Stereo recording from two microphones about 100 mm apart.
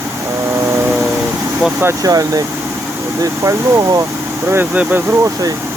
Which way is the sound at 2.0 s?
35° right (ahead or behind).